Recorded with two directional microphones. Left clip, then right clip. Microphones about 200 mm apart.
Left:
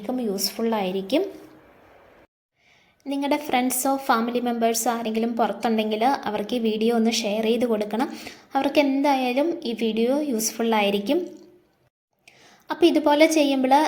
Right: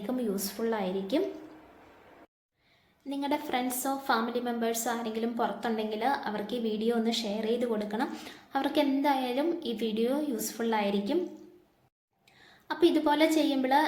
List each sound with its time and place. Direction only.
0.2 s a woman's voice: 20° left (ahead or behind)
3.1 s a woman's voice: 30° left (ahead or behind)
12.6 s a woman's voice: 30° left (ahead or behind)